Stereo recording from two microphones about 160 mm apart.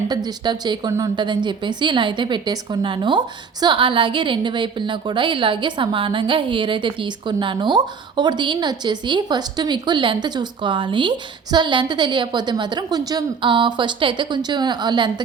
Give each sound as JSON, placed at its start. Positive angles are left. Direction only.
{"t": 0.3, "sound": "a woman's voice", "side_deg": -25}